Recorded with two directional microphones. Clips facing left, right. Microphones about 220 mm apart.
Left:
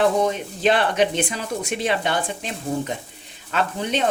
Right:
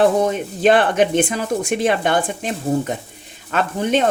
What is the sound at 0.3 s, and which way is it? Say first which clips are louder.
Speech: right 5 dB; 50° right (ahead or behind).